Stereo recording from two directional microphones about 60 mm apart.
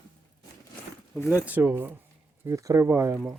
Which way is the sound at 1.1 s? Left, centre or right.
Left.